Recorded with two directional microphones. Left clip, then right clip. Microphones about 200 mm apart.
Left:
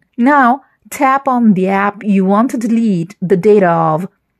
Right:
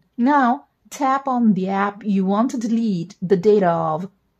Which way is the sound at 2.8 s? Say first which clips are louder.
Left 8 dB; 15° left (ahead or behind).